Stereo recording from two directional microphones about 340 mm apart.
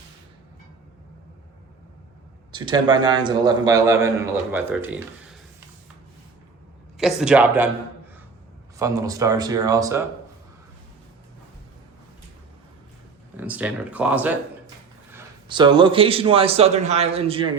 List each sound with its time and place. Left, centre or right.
2.5 s speech: centre
7.0 s speech: centre
8.8 s speech: centre
13.3 s speech: centre